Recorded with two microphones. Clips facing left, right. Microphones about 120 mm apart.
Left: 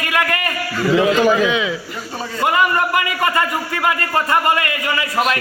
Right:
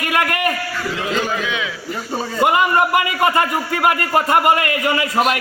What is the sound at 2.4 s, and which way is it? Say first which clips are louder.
A man's voice: right 1 dB; 20° right (ahead or behind).